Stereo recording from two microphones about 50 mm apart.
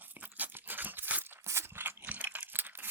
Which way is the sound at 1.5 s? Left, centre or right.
Right.